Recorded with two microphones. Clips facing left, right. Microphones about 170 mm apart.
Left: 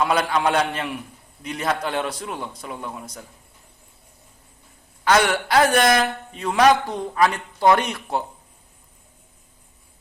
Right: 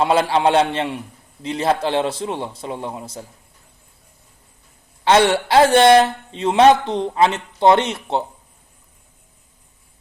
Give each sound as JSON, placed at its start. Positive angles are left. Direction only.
{"t": 0.0, "sound": "a man's voice", "side_deg": -30}
{"t": 5.0, "sound": "a man's voice", "side_deg": -30}